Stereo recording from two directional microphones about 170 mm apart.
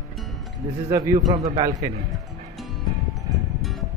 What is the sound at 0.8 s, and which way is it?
A man's voice, 20° right (ahead or behind).